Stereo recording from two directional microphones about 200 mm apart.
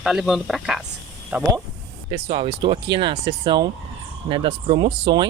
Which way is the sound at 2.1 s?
30° right (ahead or behind).